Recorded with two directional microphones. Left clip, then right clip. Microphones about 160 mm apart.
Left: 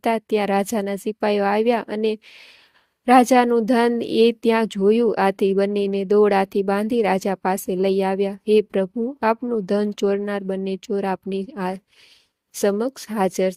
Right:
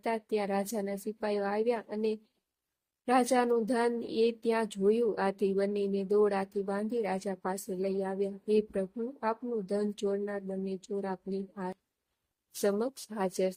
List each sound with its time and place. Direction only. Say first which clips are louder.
0.0 s speech: left 11 dB; 50° left (ahead or behind)